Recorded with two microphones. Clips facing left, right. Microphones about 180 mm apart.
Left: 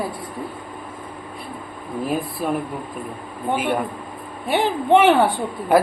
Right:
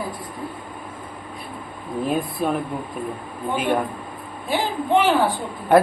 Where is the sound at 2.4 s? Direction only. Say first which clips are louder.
Right 1 dB; 5° left (ahead or behind).